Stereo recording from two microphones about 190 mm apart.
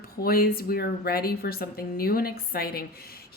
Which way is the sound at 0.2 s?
50° left (ahead or behind).